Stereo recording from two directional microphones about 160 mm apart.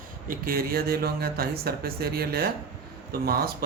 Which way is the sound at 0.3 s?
65° right (ahead or behind).